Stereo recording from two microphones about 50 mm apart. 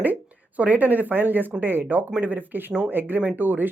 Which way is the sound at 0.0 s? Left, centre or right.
Right.